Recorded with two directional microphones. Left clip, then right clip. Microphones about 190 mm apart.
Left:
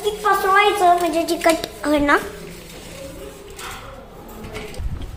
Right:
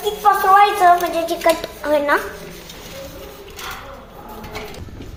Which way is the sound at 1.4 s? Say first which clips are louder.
Right 2 dB; 50° left (ahead or behind).